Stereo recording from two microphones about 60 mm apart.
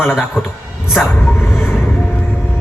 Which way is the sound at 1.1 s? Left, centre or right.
Left.